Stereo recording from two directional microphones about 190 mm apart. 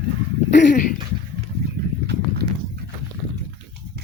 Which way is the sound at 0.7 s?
45° left (ahead or behind).